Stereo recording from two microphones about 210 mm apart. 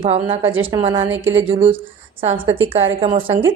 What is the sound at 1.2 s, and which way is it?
Speech, 65° right (ahead or behind).